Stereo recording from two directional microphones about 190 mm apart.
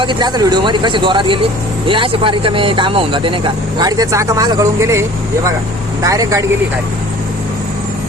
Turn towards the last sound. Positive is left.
turn(degrees=-20)  # may be behind; listen again after turning